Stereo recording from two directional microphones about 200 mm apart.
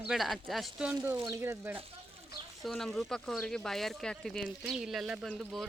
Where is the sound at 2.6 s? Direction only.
Centre (ahead or behind).